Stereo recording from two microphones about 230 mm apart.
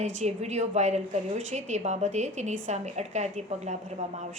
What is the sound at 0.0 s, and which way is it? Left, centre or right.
A woman's voice, right.